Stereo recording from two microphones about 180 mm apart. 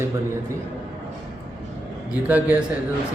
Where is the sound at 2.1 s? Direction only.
5° right (ahead or behind).